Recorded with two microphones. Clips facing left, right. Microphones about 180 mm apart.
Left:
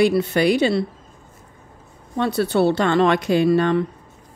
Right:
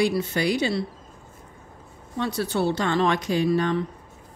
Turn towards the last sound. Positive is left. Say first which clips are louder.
# left 5 dB
turn(degrees=60)  # may be behind; listen again after turning